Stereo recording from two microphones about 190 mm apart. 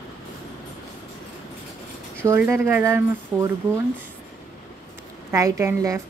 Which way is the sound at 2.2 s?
15° right (ahead or behind).